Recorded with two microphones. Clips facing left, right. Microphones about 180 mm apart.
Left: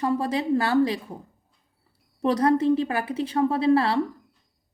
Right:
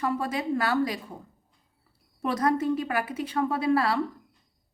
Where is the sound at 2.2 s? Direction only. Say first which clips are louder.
Left 5 dB; 30° left (ahead or behind).